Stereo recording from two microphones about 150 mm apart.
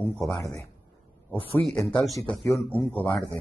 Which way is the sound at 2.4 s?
20° left (ahead or behind).